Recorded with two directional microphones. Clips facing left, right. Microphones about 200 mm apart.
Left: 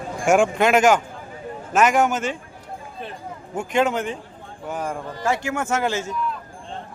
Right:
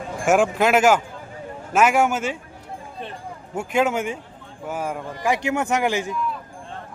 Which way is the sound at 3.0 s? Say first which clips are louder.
Even; centre (ahead or behind).